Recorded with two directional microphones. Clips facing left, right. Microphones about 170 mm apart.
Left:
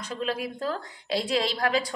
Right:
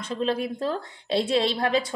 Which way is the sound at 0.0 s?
30° right (ahead or behind).